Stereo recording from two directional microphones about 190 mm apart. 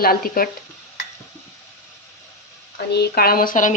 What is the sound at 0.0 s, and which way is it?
Speech, 50° left (ahead or behind).